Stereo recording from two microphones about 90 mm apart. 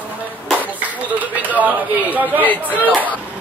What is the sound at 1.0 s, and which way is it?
Speech, 20° right (ahead or behind).